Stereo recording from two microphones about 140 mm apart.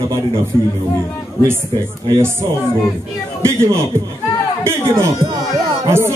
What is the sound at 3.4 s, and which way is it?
Speech, 20° right (ahead or behind).